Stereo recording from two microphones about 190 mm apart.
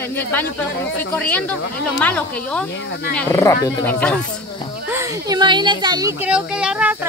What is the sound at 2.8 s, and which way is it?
Speech, 70° left (ahead or behind).